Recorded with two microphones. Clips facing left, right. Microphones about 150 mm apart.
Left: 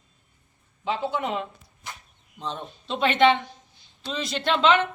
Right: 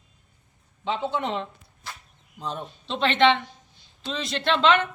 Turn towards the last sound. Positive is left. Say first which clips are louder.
# even
turn(degrees=5)  # may be behind; listen again after turning